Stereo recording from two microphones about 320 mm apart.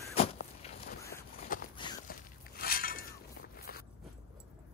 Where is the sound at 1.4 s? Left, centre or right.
Left.